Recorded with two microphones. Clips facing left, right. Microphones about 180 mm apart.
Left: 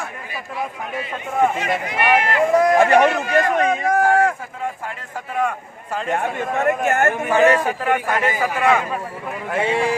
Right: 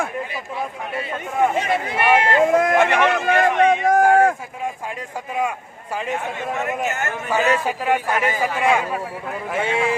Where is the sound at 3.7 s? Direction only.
25° right (ahead or behind).